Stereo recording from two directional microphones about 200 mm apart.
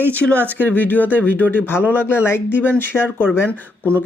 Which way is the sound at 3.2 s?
Centre (ahead or behind).